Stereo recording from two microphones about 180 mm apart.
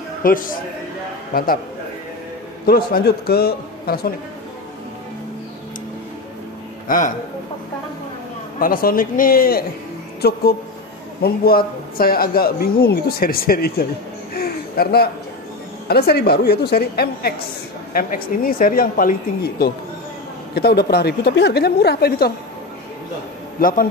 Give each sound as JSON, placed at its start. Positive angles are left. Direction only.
{"t": 0.2, "sound": "speech", "side_deg": 50}
{"t": 2.6, "sound": "speech", "side_deg": 55}
{"t": 6.9, "sound": "speech", "side_deg": 50}
{"t": 8.5, "sound": "speech", "side_deg": 55}
{"t": 14.3, "sound": "a sound", "side_deg": 55}
{"t": 15.9, "sound": "speech", "side_deg": 60}
{"t": 23.6, "sound": "speech", "side_deg": 50}